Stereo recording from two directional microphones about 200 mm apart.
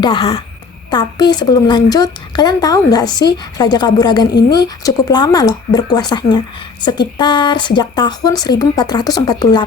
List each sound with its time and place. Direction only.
0.0 s a woman's voice: 25° left (ahead or behind)
4.3 s a woman's voice: 55° left (ahead or behind)
4.5 s a woman's voice: 15° left (ahead or behind)